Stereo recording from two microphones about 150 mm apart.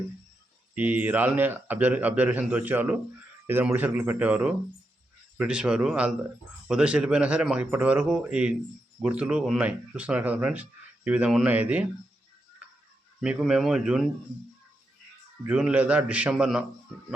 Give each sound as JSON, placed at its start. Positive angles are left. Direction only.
{"t": 0.8, "sound": "speech", "side_deg": -10}
{"t": 13.2, "sound": "speech", "side_deg": 0}
{"t": 15.4, "sound": "speech", "side_deg": -5}